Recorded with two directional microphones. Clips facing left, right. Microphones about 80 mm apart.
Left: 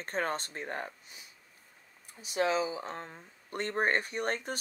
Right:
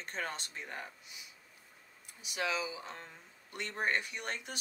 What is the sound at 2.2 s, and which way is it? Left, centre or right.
Speech, left.